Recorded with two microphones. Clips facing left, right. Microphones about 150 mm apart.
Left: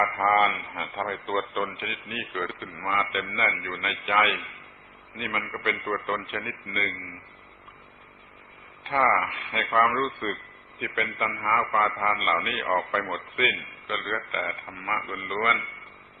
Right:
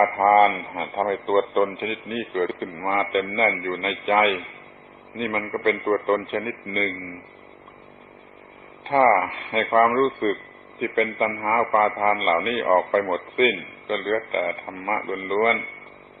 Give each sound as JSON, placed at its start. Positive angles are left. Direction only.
{"t": 0.0, "sound": "a man's voice", "side_deg": -35}
{"t": 8.8, "sound": "a man's voice", "side_deg": -35}